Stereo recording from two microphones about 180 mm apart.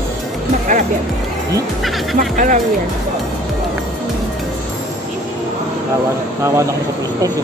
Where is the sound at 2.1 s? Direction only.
50° right (ahead or behind).